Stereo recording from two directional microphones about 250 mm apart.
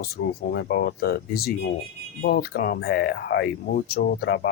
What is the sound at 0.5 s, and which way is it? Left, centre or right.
Speech, left.